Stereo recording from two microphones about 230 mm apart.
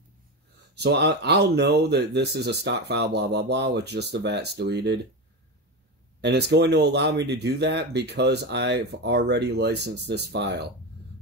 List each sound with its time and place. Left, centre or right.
0.7 s speech: right
6.2 s speech: right